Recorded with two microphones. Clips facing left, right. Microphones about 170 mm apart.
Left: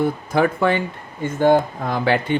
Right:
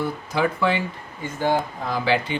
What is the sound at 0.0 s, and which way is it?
Speech, 50° left (ahead or behind).